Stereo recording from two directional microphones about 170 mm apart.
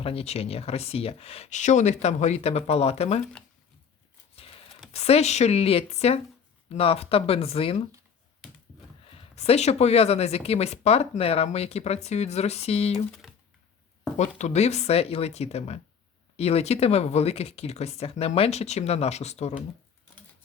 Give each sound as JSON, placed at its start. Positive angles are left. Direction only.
{"t": 0.0, "sound": "speech", "side_deg": 35}
{"t": 4.9, "sound": "speech", "side_deg": 35}
{"t": 9.1, "sound": "speech", "side_deg": 35}
{"t": 14.2, "sound": "speech", "side_deg": 40}